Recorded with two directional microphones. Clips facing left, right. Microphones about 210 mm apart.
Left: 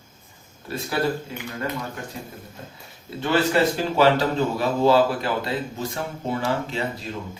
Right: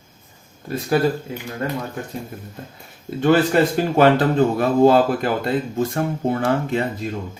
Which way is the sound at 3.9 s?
55° right (ahead or behind).